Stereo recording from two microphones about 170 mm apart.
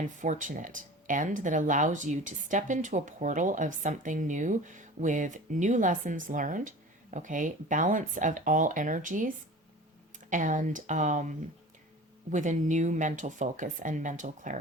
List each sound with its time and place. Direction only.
0.0 s speech: 50° right (ahead or behind)